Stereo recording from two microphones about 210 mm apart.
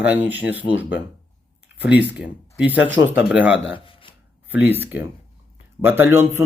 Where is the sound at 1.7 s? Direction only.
5° right (ahead or behind).